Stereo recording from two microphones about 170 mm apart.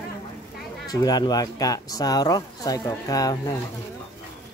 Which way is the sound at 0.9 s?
25° left (ahead or behind).